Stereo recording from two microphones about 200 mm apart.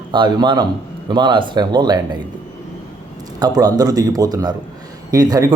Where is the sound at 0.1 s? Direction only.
25° right (ahead or behind).